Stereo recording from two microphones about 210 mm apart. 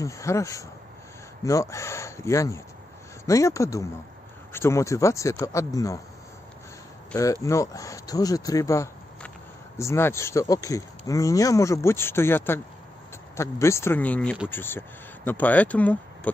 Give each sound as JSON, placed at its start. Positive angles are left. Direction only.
{"t": 0.0, "sound": "speech", "side_deg": 15}
{"t": 7.4, "sound": "speech", "side_deg": 15}